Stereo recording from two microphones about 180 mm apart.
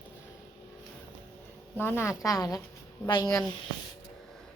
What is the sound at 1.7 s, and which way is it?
Speech, 10° left (ahead or behind).